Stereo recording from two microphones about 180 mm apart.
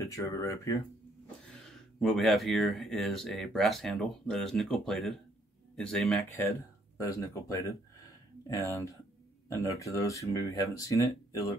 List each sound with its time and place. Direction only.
0.0 s speech: 15° left (ahead or behind)
1.5 s speech: centre (ahead or behind)
7.0 s speech: 20° left (ahead or behind)